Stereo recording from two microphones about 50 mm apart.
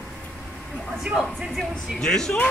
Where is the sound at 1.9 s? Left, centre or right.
Centre.